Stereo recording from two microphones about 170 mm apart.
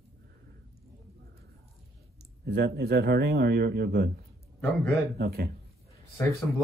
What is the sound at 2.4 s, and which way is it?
Speech, 70° right (ahead or behind).